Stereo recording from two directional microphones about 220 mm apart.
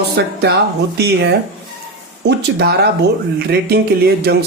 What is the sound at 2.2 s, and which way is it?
Speech, 45° right (ahead or behind).